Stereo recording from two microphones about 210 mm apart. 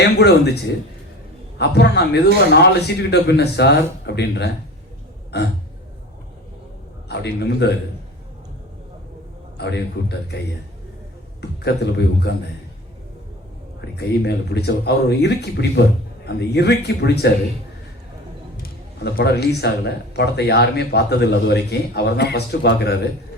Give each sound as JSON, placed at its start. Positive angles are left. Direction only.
{"t": 0.0, "sound": "a man's voice", "side_deg": 50}
{"t": 1.5, "sound": "a man's voice", "side_deg": 50}
{"t": 7.1, "sound": "a man's voice", "side_deg": 50}
{"t": 9.6, "sound": "a man's voice", "side_deg": 55}
{"t": 11.3, "sound": "a man's voice", "side_deg": 55}
{"t": 13.9, "sound": "a man's voice", "side_deg": 50}
{"t": 18.6, "sound": "a man's voice", "side_deg": 50}